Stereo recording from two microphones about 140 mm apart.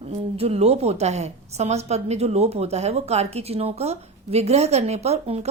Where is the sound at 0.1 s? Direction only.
45° right (ahead or behind).